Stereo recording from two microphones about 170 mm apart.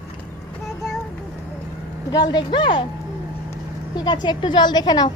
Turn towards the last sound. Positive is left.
turn(degrees=25)  # may be behind; listen again after turning